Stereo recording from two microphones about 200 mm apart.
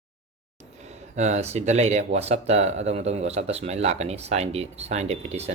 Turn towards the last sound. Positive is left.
turn(degrees=-30)  # may be behind; listen again after turning